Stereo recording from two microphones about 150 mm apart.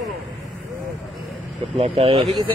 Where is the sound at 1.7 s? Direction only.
40° right (ahead or behind).